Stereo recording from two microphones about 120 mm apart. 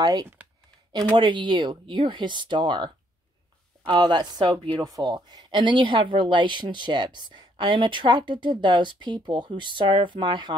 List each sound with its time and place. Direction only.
0.0 s speech: 30° right (ahead or behind)